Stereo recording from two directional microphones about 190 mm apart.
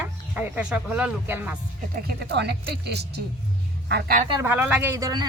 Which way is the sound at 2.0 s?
60° right (ahead or behind).